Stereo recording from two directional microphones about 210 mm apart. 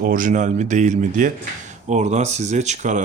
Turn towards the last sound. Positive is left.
turn(degrees=-35)  # may be behind; listen again after turning